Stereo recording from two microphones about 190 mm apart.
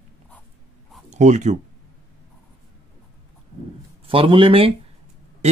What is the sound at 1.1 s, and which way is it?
Speech, 40° right (ahead or behind).